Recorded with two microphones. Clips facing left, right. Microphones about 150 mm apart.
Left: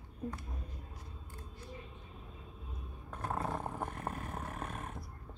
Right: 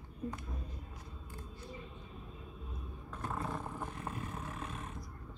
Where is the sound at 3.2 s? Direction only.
45° left (ahead or behind).